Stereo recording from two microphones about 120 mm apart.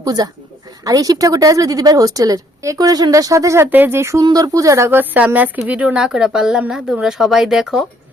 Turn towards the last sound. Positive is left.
turn(degrees=-5)  # may be behind; listen again after turning